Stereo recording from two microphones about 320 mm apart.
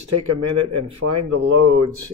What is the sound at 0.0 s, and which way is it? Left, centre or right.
Speech, right.